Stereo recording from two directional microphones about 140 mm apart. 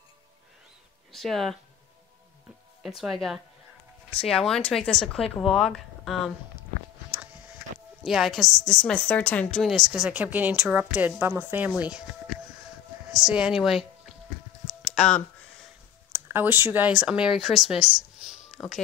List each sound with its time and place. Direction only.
1.1 s speech: centre (ahead or behind)
2.8 s speech: 5° right (ahead or behind)
8.0 s speech: centre (ahead or behind)
13.1 s speech: 5° right (ahead or behind)
14.8 s a sound: centre (ahead or behind)
16.1 s speech: 15° right (ahead or behind)